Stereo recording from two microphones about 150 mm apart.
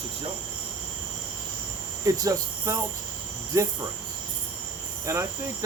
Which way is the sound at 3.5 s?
20° right (ahead or behind).